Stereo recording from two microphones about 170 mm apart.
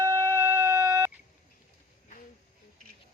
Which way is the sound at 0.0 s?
20° right (ahead or behind).